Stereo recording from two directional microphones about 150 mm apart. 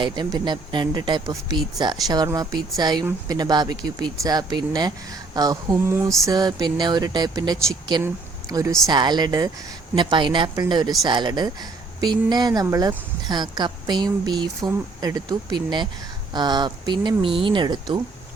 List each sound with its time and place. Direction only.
0.0 s speech: 30° right (ahead or behind)